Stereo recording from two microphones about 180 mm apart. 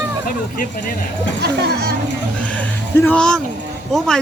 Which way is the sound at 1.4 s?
65° right (ahead or behind).